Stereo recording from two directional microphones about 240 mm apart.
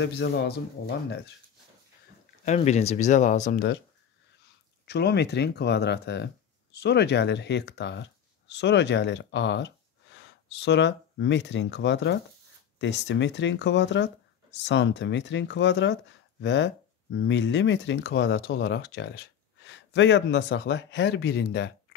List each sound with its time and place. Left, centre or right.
0.0 s speech: left
2.4 s speech: left
4.8 s speech: left